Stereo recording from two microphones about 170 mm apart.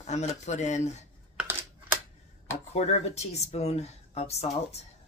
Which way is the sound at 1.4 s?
10° right (ahead or behind).